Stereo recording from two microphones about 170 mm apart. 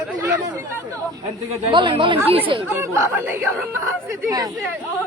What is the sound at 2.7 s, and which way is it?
Speech, 15° right (ahead or behind).